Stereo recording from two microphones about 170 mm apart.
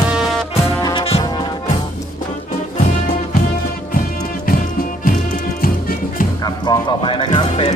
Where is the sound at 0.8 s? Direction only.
25° left (ahead or behind).